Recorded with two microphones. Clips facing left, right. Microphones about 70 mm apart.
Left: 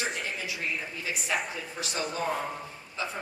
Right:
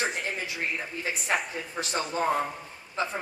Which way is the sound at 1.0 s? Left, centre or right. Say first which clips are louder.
Right 3 dB; right.